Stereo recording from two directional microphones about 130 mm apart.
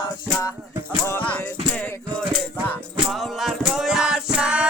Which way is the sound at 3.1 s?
Centre (ahead or behind).